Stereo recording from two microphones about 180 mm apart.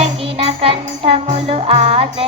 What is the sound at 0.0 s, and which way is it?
Music, 35° right (ahead or behind).